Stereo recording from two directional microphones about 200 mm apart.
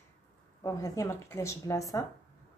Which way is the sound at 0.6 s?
15° left (ahead or behind).